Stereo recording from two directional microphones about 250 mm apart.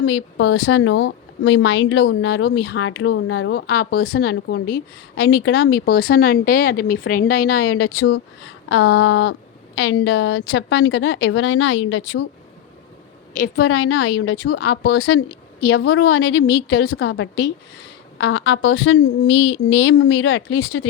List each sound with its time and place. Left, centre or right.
0.0 s a woman's voice: left
3.5 s a woman's voice: left
7.4 s a woman's voice: left
13.3 s a woman's voice: left
13.7 s a woman's voice: left
15.6 s a woman's voice: left
15.9 s a woman's voice: left
16.5 s a woman's voice: left